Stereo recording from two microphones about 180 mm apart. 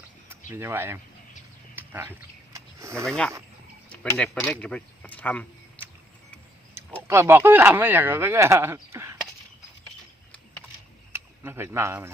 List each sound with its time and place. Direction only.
0.5 s speech: 10° right (ahead or behind)
1.7 s a sound: 10° right (ahead or behind)
3.1 s speech: 5° left (ahead or behind)
3.8 s a sound: 15° left (ahead or behind)
4.2 s speech: centre (ahead or behind)
7.1 s speech: 15° right (ahead or behind)
11.1 s speech: 15° right (ahead or behind)